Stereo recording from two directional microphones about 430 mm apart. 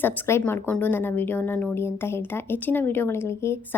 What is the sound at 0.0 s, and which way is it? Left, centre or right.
Speech, centre.